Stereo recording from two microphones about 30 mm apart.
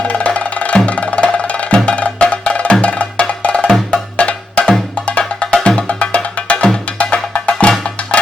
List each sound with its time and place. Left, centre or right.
0.0 s music: left
2.3 s wood block: left
3.9 s percussion: left
4.9 s music: left